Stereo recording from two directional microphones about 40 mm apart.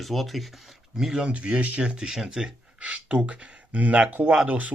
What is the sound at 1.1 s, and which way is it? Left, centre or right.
Speech, right.